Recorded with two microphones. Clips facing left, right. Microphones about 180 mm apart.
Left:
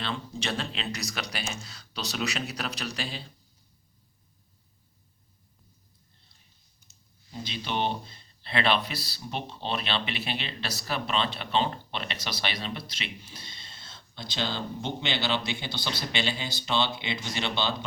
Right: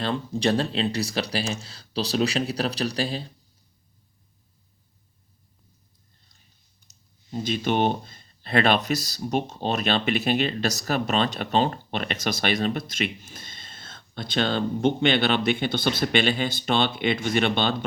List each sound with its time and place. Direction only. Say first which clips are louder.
0.0 s speech: right 9 dB; 40° right (ahead or behind)
6.8 s speech: right 1 dB; 45° right (ahead or behind)